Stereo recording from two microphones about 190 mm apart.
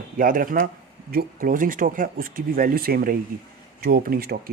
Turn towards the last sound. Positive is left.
turn(degrees=-50)  # may be behind; listen again after turning